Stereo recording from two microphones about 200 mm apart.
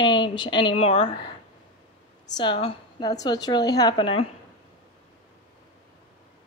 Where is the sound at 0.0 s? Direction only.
25° left (ahead or behind).